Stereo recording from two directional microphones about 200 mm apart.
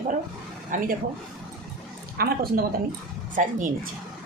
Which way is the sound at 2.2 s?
50° right (ahead or behind).